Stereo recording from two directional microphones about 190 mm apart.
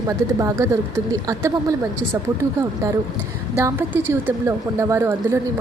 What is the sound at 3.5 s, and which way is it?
A woman's voice, 15° right (ahead or behind).